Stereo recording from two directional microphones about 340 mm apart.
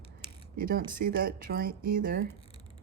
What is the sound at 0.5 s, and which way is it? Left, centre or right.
Speech, right.